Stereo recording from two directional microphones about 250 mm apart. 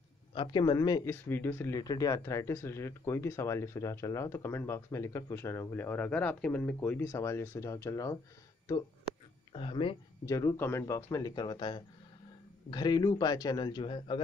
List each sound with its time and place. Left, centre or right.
0.3 s speech: centre
9.5 s speech: left